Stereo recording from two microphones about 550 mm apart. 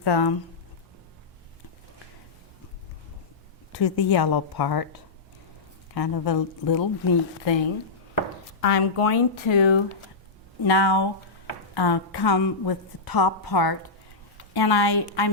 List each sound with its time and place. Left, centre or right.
0.0 s speech: left
3.7 s a woman's voice: left
5.9 s a woman's voice: left
8.6 s speech: left
10.7 s a woman's voice: left